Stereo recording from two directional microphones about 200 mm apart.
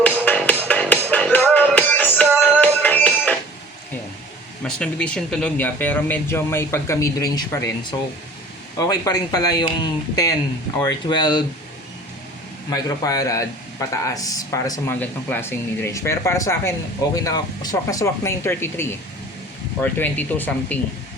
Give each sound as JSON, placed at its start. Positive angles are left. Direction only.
{"t": 0.3, "sound": "music", "side_deg": 10}
{"t": 4.6, "sound": "speech", "side_deg": 5}
{"t": 12.7, "sound": "speech", "side_deg": 20}